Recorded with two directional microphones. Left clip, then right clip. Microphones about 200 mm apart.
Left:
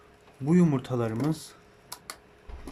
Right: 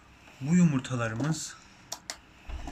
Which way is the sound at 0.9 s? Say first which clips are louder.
Left 3 dB; 25° left (ahead or behind).